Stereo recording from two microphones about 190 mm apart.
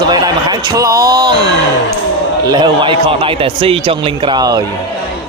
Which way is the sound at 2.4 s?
25° right (ahead or behind).